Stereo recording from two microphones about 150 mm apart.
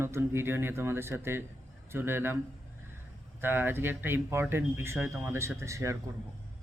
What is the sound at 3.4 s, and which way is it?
Speech, 15° right (ahead or behind).